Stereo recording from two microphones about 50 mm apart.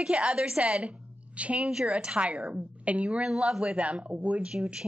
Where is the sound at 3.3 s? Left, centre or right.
Centre.